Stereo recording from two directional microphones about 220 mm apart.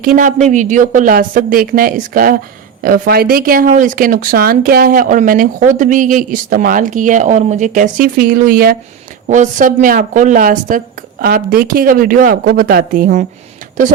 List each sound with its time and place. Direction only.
0.0 s speech: 40° right (ahead or behind)